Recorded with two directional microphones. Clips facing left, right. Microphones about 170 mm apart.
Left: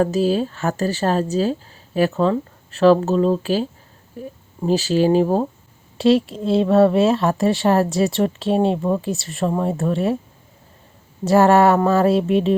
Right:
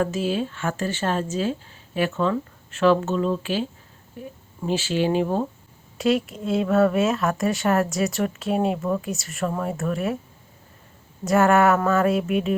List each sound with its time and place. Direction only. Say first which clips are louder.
0.0 s speech: left 6 dB; 35° left (ahead or behind)
11.3 s speech: left 4 dB; 30° left (ahead or behind)